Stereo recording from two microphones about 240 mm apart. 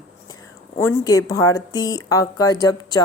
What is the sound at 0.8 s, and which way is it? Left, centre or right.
Speech, centre.